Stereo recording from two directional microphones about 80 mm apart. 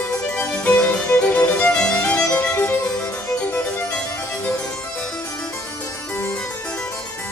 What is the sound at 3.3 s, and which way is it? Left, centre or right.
Harpsichord, centre.